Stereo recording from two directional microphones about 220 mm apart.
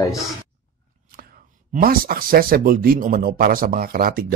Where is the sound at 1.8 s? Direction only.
40° right (ahead or behind).